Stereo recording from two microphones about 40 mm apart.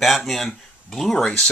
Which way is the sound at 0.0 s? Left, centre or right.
Centre.